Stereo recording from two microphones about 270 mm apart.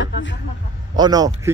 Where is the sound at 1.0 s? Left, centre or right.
Centre.